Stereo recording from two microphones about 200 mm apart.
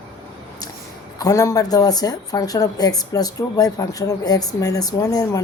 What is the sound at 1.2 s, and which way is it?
Speech, 15° left (ahead or behind).